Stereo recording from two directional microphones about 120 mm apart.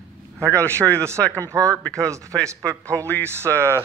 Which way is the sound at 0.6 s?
25° right (ahead or behind).